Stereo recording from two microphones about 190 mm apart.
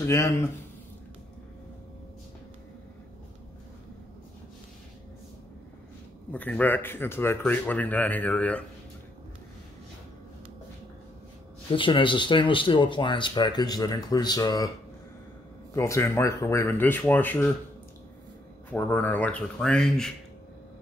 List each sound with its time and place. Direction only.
0.0 s speech: 15° left (ahead or behind)
6.3 s speech: 10° left (ahead or behind)
11.7 s speech: 25° left (ahead or behind)
15.7 s speech: 15° left (ahead or behind)
18.7 s speech: 10° left (ahead or behind)